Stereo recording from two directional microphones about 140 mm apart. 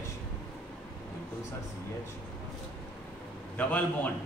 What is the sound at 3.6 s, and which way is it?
Speech, 10° left (ahead or behind).